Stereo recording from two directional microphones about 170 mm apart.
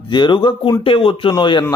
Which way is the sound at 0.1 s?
25° left (ahead or behind).